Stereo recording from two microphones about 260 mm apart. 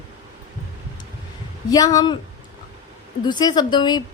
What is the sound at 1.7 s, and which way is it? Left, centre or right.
Speech, centre.